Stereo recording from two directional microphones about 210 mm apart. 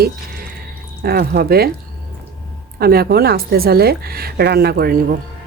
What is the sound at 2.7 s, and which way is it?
A woman's voice, 45° right (ahead or behind).